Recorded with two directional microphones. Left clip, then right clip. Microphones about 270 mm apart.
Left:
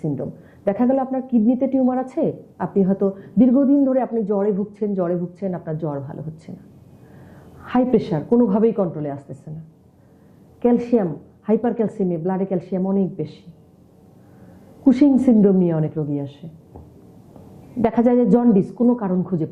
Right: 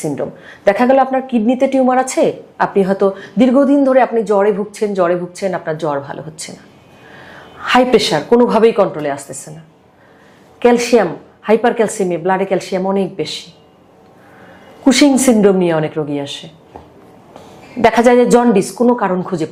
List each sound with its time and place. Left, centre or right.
0.1 s a woman's voice: centre
7.1 s a sound: centre
8.4 s a woman's voice: centre
10.6 s a woman's voice: centre